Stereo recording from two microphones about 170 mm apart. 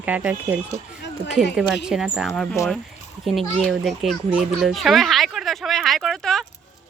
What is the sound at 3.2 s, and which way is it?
Children playing, centre (ahead or behind).